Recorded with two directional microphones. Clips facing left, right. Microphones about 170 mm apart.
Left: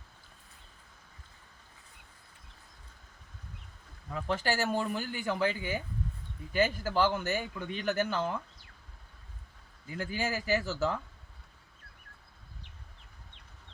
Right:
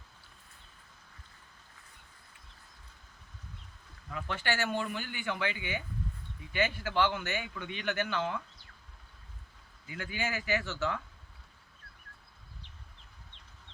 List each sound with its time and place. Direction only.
4.1 s speech: 35° left (ahead or behind)
9.8 s speech: 40° left (ahead or behind)